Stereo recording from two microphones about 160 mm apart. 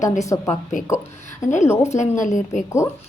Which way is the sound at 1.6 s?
15° left (ahead or behind).